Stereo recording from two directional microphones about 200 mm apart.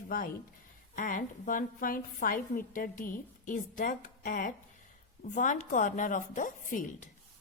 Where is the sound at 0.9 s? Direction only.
40° left (ahead or behind).